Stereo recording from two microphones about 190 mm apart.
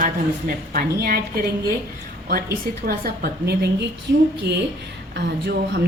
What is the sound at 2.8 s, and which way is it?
A woman's voice, 55° right (ahead or behind).